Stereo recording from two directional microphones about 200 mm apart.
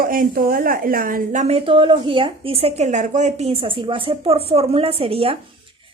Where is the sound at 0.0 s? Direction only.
45° right (ahead or behind).